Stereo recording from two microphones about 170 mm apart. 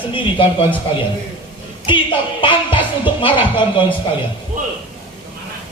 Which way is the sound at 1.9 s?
30° left (ahead or behind).